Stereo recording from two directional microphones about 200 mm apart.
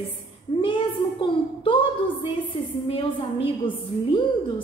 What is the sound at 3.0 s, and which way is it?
A woman's voice, 25° left (ahead or behind).